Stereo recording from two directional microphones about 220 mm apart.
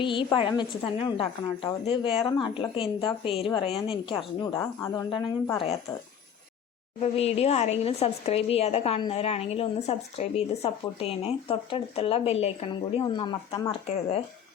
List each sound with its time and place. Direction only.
0.0 s a woman's voice: 20° left (ahead or behind)
7.0 s a woman's voice: 30° left (ahead or behind)